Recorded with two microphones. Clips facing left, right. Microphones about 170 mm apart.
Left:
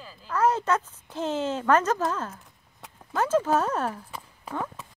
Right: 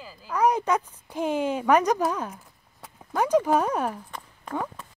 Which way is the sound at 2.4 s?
Centre (ahead or behind).